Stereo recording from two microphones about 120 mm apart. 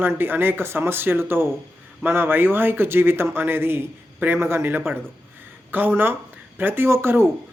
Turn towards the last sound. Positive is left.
turn(degrees=-20)  # may be behind; listen again after turning